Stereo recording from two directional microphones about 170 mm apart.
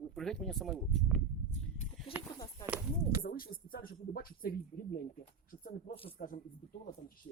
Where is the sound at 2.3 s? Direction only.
20° left (ahead or behind).